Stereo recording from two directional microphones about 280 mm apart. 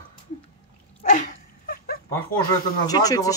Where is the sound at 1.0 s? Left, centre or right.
Left.